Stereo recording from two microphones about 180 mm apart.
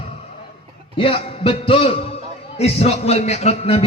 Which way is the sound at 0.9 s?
30° left (ahead or behind).